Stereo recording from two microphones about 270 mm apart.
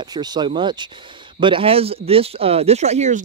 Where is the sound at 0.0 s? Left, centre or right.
Centre.